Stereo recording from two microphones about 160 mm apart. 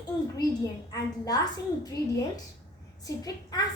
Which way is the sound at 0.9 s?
20° left (ahead or behind).